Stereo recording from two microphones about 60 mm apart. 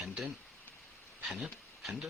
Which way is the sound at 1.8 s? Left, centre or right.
Centre.